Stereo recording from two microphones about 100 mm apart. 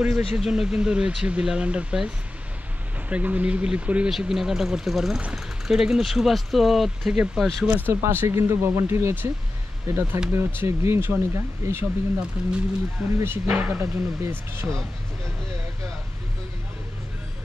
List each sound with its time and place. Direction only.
0.0 s speech: 5° right (ahead or behind)
3.1 s speech: 15° right (ahead or behind)
7.6 s speech: 20° right (ahead or behind)
12.4 s speech: 10° right (ahead or behind); by 14.8 s 25° right (ahead or behind)